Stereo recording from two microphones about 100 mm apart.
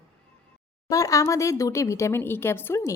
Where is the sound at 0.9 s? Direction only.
35° left (ahead or behind).